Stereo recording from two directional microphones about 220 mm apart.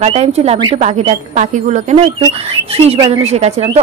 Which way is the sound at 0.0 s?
30° right (ahead or behind).